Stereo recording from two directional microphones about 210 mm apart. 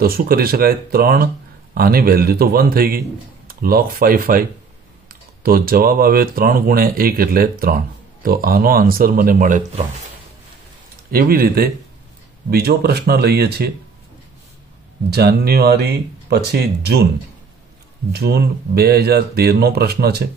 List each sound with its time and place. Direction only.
0.0 s speech: 45° right (ahead or behind)
11.1 s speech: 45° right (ahead or behind)
15.0 s speech: 50° right (ahead or behind)
18.1 s speech: 50° right (ahead or behind)